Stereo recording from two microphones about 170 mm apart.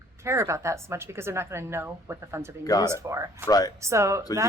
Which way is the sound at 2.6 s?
20° left (ahead or behind).